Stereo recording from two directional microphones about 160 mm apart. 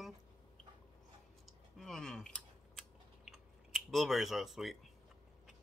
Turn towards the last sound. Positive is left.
turn(degrees=0)  # may be behind; listen again after turning